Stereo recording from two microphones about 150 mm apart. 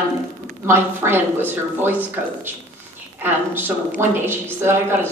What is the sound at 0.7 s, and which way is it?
A woman's voice, 15° right (ahead or behind).